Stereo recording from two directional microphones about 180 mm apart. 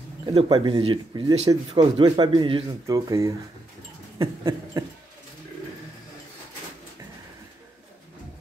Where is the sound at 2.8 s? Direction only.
20° right (ahead or behind).